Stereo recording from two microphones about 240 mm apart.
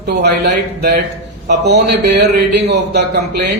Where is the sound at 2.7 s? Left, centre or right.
Right.